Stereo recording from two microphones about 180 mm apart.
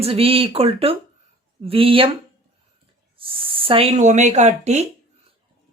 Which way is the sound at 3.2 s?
30° right (ahead or behind).